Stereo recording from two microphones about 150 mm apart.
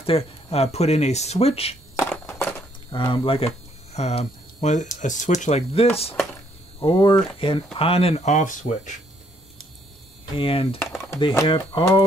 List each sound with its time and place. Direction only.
0.0 s speech: 40° left (ahead or behind)
2.0 s a sound: 20° left (ahead or behind)
2.9 s speech: 35° left (ahead or behind)
6.8 s speech: 35° left (ahead or behind); by 8.9 s 55° left (ahead or behind)
10.3 s speech: 40° left (ahead or behind)